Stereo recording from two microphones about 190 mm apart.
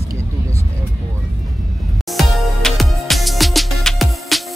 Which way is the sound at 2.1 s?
Centre (ahead or behind).